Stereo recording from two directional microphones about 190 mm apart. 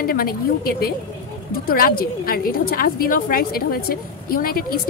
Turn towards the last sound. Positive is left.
turn(degrees=50)  # may be behind; listen again after turning